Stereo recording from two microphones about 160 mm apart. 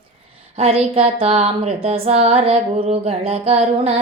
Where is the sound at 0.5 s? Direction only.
40° right (ahead or behind).